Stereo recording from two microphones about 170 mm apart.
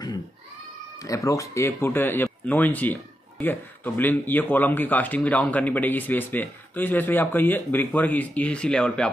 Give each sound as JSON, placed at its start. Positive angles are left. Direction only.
{"t": 1.0, "sound": "speech", "side_deg": 20}